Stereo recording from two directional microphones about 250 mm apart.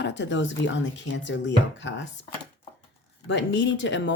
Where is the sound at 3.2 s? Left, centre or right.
Left.